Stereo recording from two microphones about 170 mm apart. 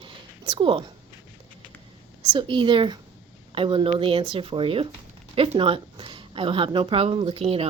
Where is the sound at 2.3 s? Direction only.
30° right (ahead or behind).